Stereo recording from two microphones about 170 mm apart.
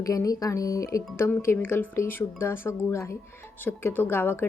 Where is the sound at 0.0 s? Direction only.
20° left (ahead or behind).